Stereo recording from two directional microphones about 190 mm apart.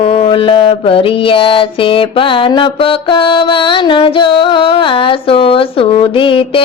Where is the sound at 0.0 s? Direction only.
30° left (ahead or behind).